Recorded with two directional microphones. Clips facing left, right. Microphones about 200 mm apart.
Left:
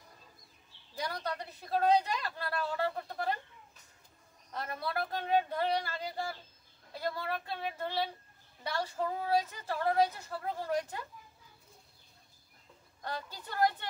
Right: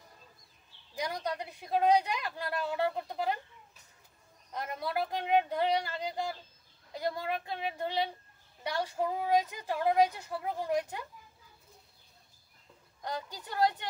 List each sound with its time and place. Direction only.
0.9 s a woman's voice: 15° right (ahead or behind)
4.5 s a woman's voice: 15° right (ahead or behind)
13.0 s a woman's voice: 15° right (ahead or behind)